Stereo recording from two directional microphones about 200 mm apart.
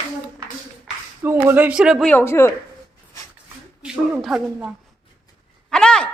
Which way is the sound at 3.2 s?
15° left (ahead or behind).